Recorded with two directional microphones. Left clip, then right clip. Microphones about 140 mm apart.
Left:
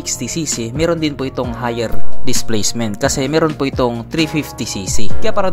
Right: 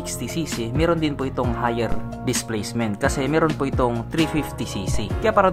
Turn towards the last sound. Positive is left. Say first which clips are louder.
# even
turn(degrees=40)  # may be behind; listen again after turning